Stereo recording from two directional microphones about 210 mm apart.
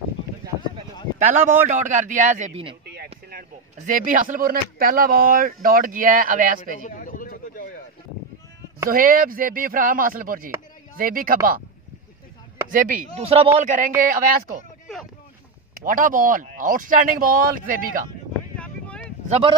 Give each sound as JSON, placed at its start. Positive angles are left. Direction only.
{"t": 1.2, "sound": "speech", "side_deg": -35}
{"t": 2.9, "sound": "a sound", "side_deg": -50}
{"t": 3.7, "sound": "speech", "side_deg": -40}
{"t": 6.8, "sound": "a sound", "side_deg": 40}
{"t": 8.9, "sound": "speech", "side_deg": -40}
{"t": 12.6, "sound": "speech", "side_deg": -40}
{"t": 13.1, "sound": "speech", "side_deg": -30}
{"t": 14.9, "sound": "boat", "side_deg": 5}
{"t": 15.8, "sound": "speech", "side_deg": -40}
{"t": 19.2, "sound": "speech", "side_deg": -30}